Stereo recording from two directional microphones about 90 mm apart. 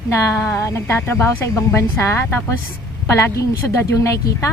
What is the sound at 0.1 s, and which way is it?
Speech, 30° left (ahead or behind).